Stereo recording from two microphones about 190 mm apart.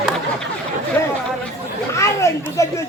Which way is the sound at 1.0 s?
15° left (ahead or behind).